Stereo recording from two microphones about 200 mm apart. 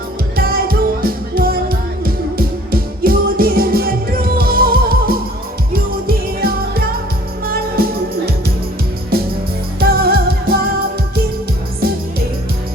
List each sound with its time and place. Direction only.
0.3 s music: 45° right (ahead or behind)
9.1 s music: 50° right (ahead or behind)